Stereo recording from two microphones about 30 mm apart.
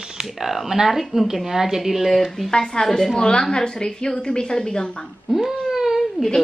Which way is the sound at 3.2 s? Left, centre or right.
Left.